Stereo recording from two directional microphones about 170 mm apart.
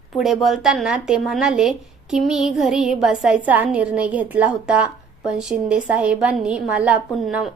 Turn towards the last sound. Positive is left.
turn(degrees=0)  # may be behind; listen again after turning